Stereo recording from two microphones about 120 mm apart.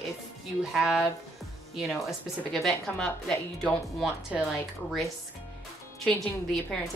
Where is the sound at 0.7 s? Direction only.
5° right (ahead or behind).